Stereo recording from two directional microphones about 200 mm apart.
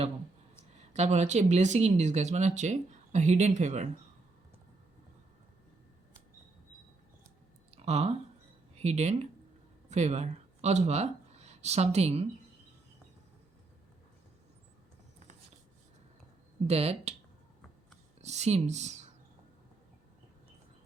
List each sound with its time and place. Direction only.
0.9 s speech: 35° right (ahead or behind)
7.7 s a sound: 30° right (ahead or behind)
8.7 s speech: 35° right (ahead or behind)
16.6 s speech: 30° right (ahead or behind)
18.2 s speech: 35° right (ahead or behind)